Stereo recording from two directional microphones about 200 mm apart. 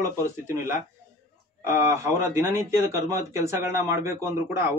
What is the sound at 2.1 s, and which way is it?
Speech, 15° right (ahead or behind).